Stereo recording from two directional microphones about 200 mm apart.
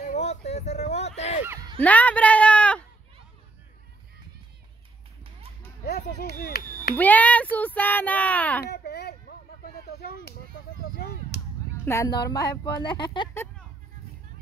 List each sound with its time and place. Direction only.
0.0 s a sound: 35° left (ahead or behind)
1.8 s a man's voice: 5° left (ahead or behind)
5.9 s speech: 50° left (ahead or behind)
7.0 s speech: 10° left (ahead or behind)
8.6 s a sound: 50° left (ahead or behind)
11.7 s speech: 10° left (ahead or behind)
13.3 s speech: 10° left (ahead or behind)